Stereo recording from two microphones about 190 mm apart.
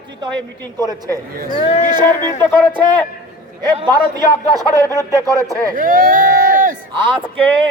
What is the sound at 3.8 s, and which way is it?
A man's voice, 20° right (ahead or behind).